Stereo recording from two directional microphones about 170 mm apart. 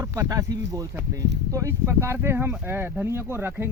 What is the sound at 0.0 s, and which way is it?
Speech, 20° right (ahead or behind).